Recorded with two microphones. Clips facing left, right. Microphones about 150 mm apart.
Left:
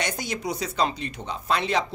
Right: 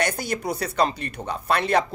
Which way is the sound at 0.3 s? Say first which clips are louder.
Right 2 dB; 55° right (ahead or behind).